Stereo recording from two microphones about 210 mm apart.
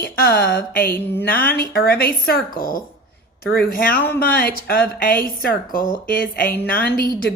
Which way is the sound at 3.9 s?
10° left (ahead or behind).